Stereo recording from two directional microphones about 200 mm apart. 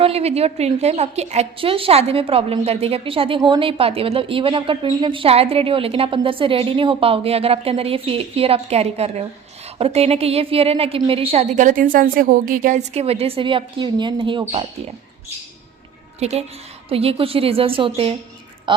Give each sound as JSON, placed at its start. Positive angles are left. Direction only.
{"t": 0.0, "sound": "a woman's voice", "side_deg": -30}
{"t": 16.9, "sound": "a woman's voice", "side_deg": -30}